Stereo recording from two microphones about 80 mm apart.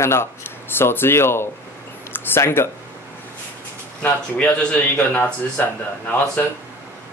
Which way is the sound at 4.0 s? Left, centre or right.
Centre.